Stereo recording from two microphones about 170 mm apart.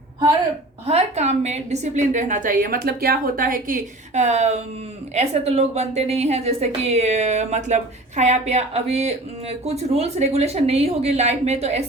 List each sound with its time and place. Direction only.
0.9 s a woman's voice: 40° right (ahead or behind)